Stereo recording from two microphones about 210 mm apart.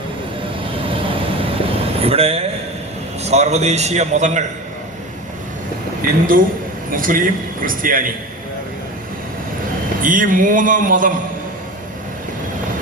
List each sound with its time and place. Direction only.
2.0 s a man's voice: 30° right (ahead or behind)
6.0 s a man's voice: 40° right (ahead or behind)
10.0 s a man's voice: 40° right (ahead or behind)